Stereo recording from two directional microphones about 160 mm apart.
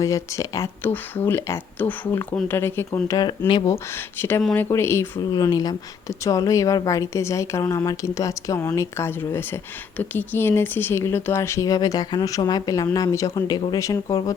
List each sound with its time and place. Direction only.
0.0 s speech: 20° left (ahead or behind)
3.7 s speech: 15° left (ahead or behind)